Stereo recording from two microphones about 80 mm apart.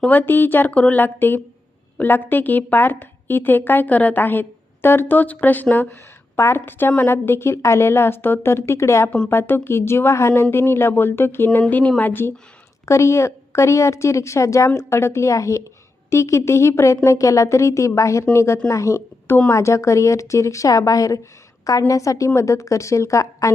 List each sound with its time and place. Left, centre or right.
0.1 s a woman's voice: left
12.8 s a woman's voice: left